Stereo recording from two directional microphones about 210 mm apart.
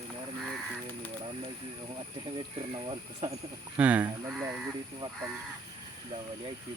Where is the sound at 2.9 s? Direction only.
25° right (ahead or behind).